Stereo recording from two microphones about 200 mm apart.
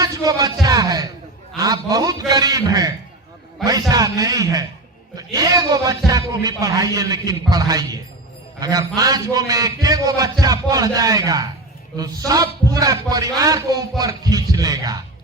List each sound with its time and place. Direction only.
0.0 s a man's voice: 15° right (ahead or behind)
9.0 s a man's voice: 20° right (ahead or behind)